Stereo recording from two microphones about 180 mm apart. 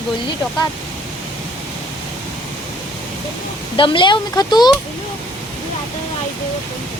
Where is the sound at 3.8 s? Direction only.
25° left (ahead or behind).